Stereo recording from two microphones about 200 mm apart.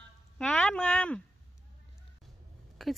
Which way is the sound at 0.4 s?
5° left (ahead or behind).